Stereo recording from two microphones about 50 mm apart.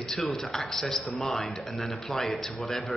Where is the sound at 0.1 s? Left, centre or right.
Centre.